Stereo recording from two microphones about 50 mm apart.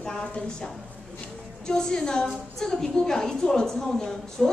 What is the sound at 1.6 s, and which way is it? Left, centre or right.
A woman's voice, centre.